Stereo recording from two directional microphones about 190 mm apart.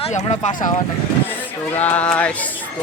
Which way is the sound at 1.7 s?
10° left (ahead or behind).